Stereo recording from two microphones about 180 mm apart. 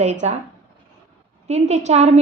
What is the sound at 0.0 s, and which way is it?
Speech, 40° right (ahead or behind).